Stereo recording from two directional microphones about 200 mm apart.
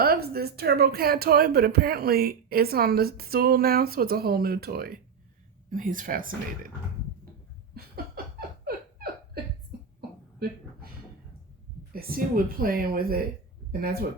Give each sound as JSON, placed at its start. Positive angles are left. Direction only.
{"t": 0.0, "sound": "speech", "side_deg": -50}
{"t": 7.9, "sound": "laughter", "side_deg": -50}
{"t": 9.7, "sound": "a sound", "side_deg": -50}
{"t": 11.9, "sound": "speech", "side_deg": -45}